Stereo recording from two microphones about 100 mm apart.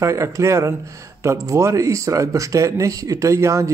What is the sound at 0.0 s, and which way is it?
A man's voice, 30° right (ahead or behind).